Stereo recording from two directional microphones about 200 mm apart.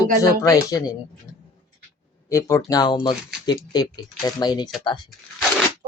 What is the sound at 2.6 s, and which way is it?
Speech, 20° left (ahead or behind).